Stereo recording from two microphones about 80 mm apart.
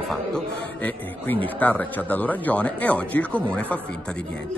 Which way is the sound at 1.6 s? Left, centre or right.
Centre.